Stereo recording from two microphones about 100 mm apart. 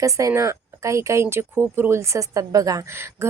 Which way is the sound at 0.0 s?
35° right (ahead or behind).